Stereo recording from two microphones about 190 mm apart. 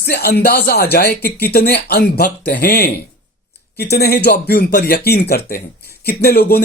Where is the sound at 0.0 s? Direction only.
55° left (ahead or behind).